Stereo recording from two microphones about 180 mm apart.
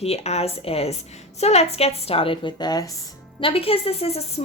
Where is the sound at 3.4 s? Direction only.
30° left (ahead or behind).